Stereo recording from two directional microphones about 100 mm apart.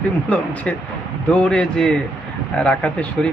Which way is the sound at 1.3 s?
10° left (ahead or behind).